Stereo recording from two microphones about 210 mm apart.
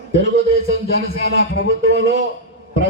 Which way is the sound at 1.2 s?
55° right (ahead or behind).